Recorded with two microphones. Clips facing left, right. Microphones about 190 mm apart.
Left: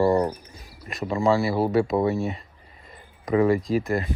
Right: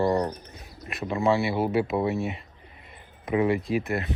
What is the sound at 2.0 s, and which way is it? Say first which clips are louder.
Speech: left 3 dB; centre (ahead or behind).